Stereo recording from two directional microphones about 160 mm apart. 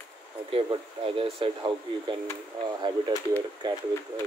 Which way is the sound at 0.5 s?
35° right (ahead or behind).